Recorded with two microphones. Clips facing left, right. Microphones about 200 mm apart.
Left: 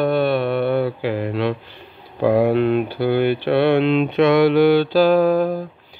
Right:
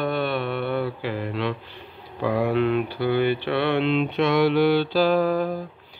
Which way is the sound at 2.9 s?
60° left (ahead or behind).